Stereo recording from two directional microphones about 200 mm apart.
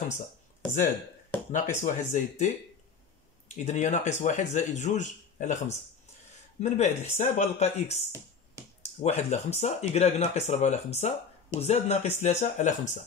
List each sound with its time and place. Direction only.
1.5 s speech: 35° left (ahead or behind)
3.5 s speech: 35° left (ahead or behind)
9.0 s speech: 35° left (ahead or behind)